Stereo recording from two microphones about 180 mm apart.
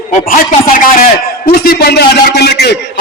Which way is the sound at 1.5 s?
55° left (ahead or behind).